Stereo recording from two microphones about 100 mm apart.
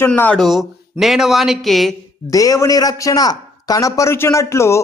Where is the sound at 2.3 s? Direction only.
35° left (ahead or behind).